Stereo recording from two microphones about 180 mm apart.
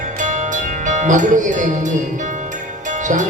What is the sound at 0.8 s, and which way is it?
Speech, 45° right (ahead or behind).